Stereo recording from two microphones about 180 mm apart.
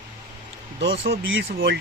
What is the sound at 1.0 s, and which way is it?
Speech, 90° right.